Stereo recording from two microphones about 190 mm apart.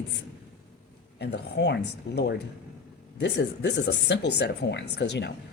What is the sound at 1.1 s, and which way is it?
Speech, 60° left (ahead or behind).